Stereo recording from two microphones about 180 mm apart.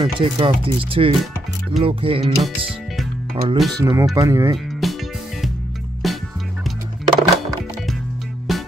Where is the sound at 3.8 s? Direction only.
15° right (ahead or behind).